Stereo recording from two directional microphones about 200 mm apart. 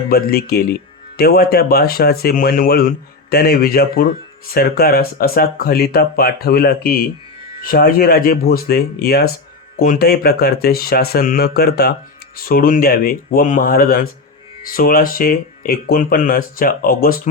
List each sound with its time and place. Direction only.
0.1 s speech: 50° left (ahead or behind)